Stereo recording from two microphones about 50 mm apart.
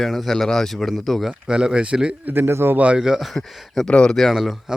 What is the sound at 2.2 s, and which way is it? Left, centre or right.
Speech, right.